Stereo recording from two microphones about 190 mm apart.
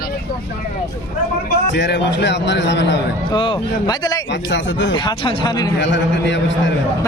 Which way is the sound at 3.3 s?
25° left (ahead or behind).